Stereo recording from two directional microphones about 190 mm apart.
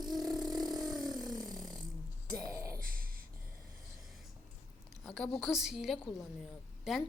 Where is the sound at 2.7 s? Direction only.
50° right (ahead or behind).